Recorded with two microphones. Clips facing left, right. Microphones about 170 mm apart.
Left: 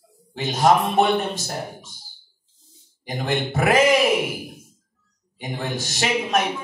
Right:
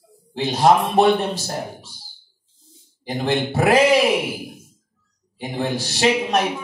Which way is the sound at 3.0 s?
30° right (ahead or behind).